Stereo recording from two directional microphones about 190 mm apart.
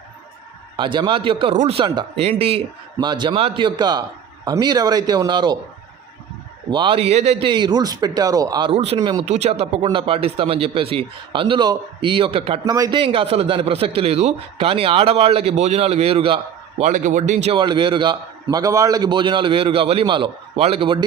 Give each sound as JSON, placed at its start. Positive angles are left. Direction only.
{"t": 0.8, "sound": "a man's voice", "side_deg": -25}
{"t": 6.7, "sound": "a man's voice", "side_deg": -25}
{"t": 8.7, "sound": "a man's voice", "side_deg": -35}